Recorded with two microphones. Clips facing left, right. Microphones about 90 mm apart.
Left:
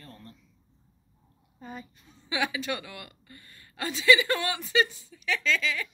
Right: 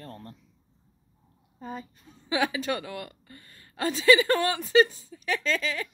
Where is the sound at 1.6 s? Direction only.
35° right (ahead or behind).